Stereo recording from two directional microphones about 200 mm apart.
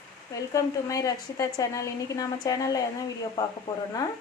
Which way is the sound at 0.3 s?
15° left (ahead or behind).